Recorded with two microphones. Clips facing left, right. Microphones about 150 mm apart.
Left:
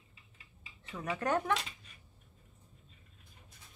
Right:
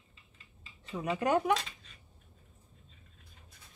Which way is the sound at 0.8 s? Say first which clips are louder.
Right 4 dB; 20° right (ahead or behind).